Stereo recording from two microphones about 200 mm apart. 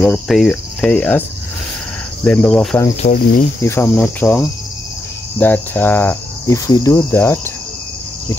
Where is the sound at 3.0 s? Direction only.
40° left (ahead or behind).